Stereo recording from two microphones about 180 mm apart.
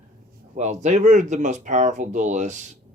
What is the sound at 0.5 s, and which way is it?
Speech, 40° right (ahead or behind).